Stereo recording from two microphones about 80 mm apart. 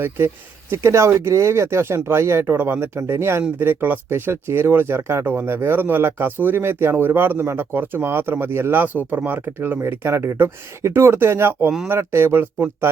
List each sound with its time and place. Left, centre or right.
0.7 s speech: right